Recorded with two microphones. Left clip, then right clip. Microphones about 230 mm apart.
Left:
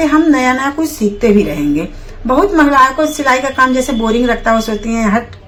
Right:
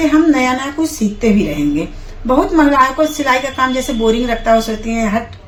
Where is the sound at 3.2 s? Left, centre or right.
Centre.